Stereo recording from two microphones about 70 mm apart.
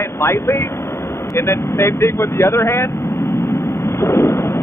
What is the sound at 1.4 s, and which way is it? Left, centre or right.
Speech, left.